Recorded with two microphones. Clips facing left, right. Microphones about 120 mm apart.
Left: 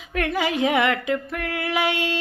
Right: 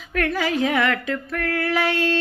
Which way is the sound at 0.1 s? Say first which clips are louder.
Right 1 dB; 20° left (ahead or behind).